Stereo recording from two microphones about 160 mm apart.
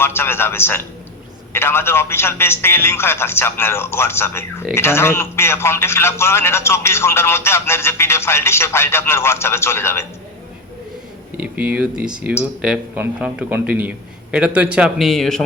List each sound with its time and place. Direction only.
0.0 s a man's voice: 15° left (ahead or behind)
11.3 s speech: 10° right (ahead or behind)